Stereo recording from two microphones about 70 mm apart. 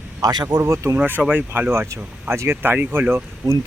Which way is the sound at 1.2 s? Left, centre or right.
Right.